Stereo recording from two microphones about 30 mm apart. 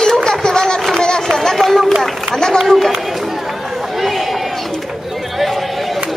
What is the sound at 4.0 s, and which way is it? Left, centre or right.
Chatter, centre.